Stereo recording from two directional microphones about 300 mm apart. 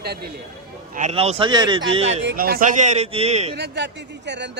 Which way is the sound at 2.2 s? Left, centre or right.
Right.